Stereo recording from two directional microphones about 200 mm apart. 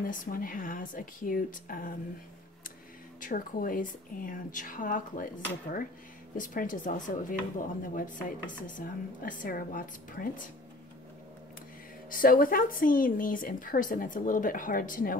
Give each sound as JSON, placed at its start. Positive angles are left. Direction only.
{"t": 0.0, "sound": "speech", "side_deg": 45}
{"t": 3.2, "sound": "speech", "side_deg": 40}
{"t": 12.1, "sound": "speech", "side_deg": 45}